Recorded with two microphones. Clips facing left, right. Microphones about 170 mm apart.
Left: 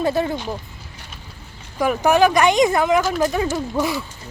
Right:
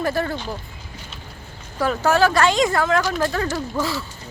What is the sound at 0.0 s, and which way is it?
Speech, 20° left (ahead or behind).